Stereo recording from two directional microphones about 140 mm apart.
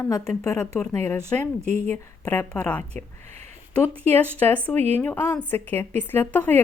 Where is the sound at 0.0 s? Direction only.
20° left (ahead or behind).